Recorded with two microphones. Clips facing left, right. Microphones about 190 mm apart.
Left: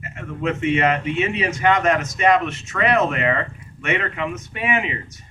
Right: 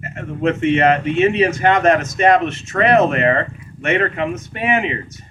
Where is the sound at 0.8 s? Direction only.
45° right (ahead or behind).